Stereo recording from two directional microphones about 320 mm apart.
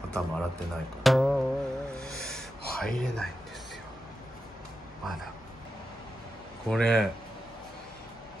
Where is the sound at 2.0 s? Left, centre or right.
Centre.